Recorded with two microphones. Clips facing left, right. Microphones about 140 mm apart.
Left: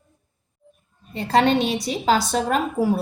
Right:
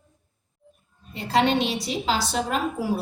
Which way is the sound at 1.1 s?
45° left (ahead or behind).